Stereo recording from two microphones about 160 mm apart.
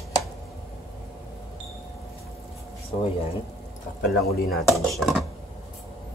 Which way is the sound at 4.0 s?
70° left (ahead or behind).